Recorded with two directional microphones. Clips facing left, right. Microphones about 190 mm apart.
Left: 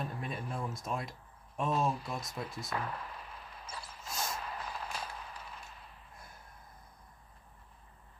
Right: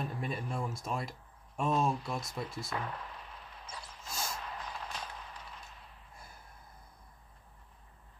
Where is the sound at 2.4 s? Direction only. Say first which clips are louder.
Even; 5° left (ahead or behind).